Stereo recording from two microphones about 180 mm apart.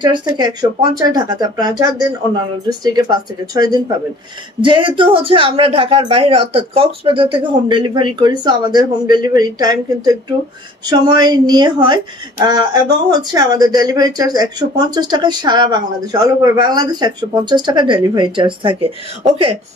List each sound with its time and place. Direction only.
0.0 s speech: 25° right (ahead or behind)